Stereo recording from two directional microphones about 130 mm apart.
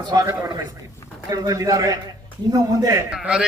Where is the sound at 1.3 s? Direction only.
25° right (ahead or behind).